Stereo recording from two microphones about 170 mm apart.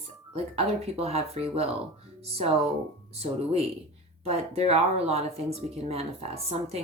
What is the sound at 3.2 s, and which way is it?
A woman's voice, 35° right (ahead or behind).